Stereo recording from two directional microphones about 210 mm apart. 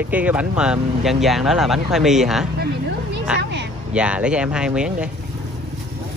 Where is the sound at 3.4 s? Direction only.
55° right (ahead or behind).